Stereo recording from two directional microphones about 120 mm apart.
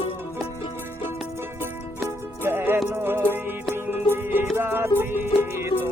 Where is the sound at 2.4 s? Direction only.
20° right (ahead or behind).